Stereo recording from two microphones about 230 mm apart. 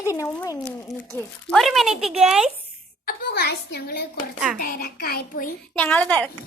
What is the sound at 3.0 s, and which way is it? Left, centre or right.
A child's voice, left.